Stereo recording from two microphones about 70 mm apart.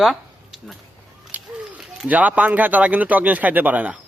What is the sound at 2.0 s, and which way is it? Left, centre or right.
Speech, right.